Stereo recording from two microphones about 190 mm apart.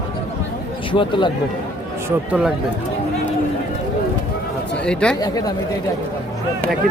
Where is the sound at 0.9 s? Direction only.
25° left (ahead or behind).